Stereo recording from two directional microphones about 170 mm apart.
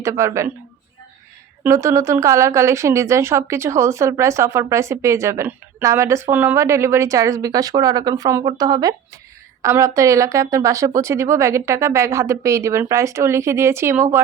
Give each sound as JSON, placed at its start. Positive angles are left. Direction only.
{"t": 0.0, "sound": "a woman's voice", "side_deg": -15}
{"t": 1.6, "sound": "a woman's voice", "side_deg": -20}